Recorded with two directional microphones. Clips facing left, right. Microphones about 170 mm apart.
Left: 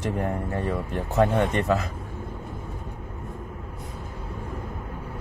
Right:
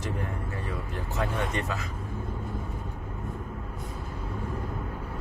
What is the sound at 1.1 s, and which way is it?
Speech, 55° left (ahead or behind).